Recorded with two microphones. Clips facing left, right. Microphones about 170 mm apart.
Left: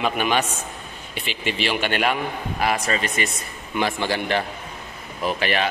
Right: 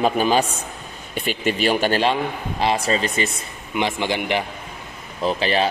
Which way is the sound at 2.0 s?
25° right (ahead or behind).